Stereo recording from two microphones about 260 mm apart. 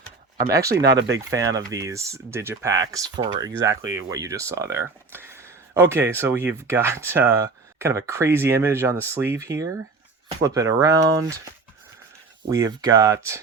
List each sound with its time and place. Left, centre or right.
0.6 s speech: right
1.1 s speech: centre
12.5 s speech: centre